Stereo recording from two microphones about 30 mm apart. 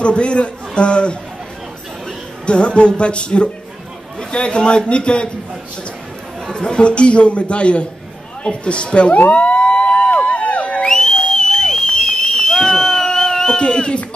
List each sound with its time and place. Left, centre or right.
0.0 s a man's voice: left
2.4 s a man's voice: left
6.6 s a man's voice: left
9.3 s emergency vehicle: left
10.1 s a sound: left
10.6 s whistle: left
10.9 s whistle: centre
11.9 s a sound: centre
13.6 s a man's voice: left